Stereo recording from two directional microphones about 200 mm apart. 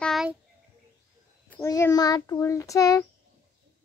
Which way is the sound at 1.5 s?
15° left (ahead or behind).